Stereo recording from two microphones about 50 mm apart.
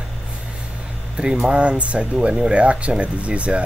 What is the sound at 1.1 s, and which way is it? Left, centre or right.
Speech, centre.